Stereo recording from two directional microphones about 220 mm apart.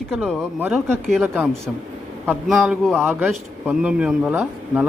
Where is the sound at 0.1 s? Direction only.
Centre (ahead or behind).